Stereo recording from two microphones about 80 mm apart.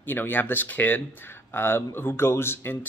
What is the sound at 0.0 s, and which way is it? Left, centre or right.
Speech, left.